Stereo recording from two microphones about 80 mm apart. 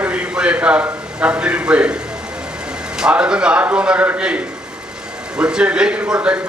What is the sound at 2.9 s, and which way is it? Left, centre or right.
A man's voice, centre.